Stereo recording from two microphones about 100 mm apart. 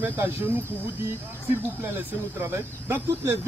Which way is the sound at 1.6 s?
20° right (ahead or behind).